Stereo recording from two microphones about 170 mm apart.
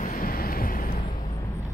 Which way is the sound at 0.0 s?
55° left (ahead or behind).